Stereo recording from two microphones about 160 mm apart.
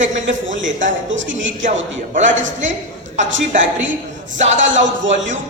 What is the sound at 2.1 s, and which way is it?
A woman's voice, 50° right (ahead or behind).